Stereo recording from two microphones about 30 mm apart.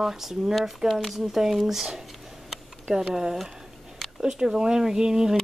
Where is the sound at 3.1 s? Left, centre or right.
Centre.